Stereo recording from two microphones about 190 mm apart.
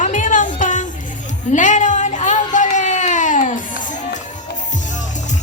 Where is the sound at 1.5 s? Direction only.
40° left (ahead or behind).